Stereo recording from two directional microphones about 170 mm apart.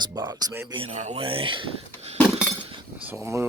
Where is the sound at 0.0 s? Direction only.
25° right (ahead or behind).